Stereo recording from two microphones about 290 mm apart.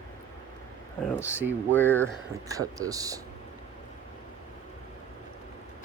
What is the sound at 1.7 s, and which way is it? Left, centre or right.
Speech, centre.